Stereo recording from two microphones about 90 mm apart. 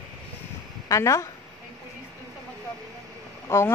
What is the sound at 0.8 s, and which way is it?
Speech, 35° left (ahead or behind).